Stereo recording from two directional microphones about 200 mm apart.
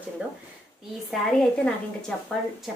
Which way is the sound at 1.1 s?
Centre (ahead or behind).